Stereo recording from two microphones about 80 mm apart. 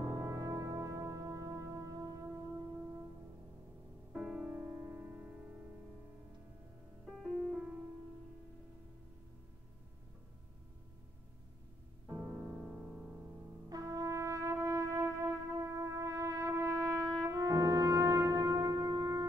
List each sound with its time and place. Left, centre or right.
0.0 s brass instrument: right
4.1 s music: centre
7.2 s music: centre
12.2 s music: centre
13.7 s music: right